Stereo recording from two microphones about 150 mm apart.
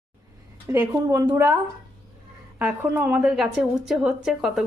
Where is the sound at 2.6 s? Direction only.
10° right (ahead or behind).